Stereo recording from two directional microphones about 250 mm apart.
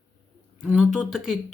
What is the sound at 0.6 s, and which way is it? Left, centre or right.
Speech, centre.